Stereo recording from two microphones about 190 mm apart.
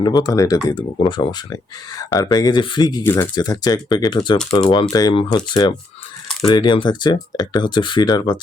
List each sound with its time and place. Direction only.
0.0 s speech: 20° left (ahead or behind)